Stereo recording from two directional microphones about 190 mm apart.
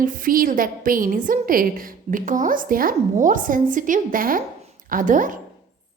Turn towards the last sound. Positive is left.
turn(degrees=-45)  # may be behind; listen again after turning